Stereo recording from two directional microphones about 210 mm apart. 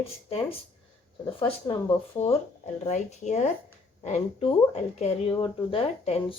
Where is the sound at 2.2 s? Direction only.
35° left (ahead or behind).